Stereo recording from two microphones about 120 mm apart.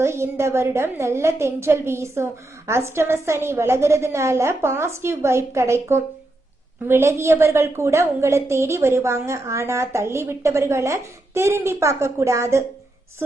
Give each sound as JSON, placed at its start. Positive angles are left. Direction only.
{"t": 0.0, "sound": "a woman's voice", "side_deg": -20}